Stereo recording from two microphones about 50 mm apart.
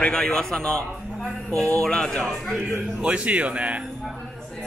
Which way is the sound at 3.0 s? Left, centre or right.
Right.